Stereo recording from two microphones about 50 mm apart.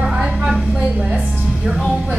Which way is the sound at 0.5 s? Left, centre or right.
Centre.